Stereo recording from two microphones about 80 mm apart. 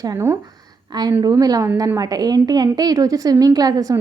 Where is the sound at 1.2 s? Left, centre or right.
Right.